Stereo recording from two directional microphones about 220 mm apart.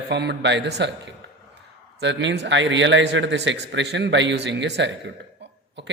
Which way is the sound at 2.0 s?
55° right (ahead or behind).